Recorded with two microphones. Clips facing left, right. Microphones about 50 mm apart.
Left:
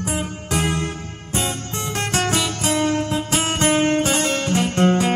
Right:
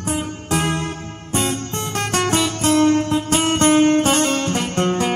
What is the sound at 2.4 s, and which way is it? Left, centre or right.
Music, left.